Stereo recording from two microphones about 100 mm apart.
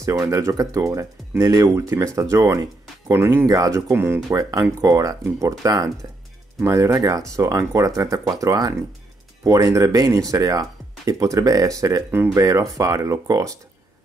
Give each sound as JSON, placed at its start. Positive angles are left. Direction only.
{"t": 0.0, "sound": "speech", "side_deg": -35}
{"t": 4.4, "sound": "speech", "side_deg": -35}